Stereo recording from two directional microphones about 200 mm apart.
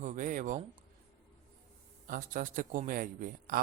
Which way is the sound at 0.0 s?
40° right (ahead or behind).